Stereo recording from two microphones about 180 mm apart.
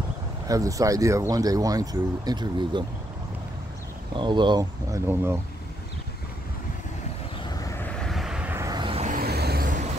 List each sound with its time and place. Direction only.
0.5 s speech: 20° right (ahead or behind)
4.1 s speech: 25° right (ahead or behind)
7.5 s vehicle: 15° left (ahead or behind); by 9.0 s 25° right (ahead or behind)
9.0 s vehicle: 55° right (ahead or behind)